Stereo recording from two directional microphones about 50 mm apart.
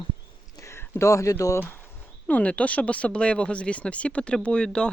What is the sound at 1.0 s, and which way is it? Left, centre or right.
Speech, left.